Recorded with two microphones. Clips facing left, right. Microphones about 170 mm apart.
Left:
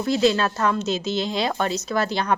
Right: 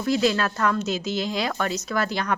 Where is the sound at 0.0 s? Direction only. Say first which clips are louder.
Left 2 dB; 25° left (ahead or behind).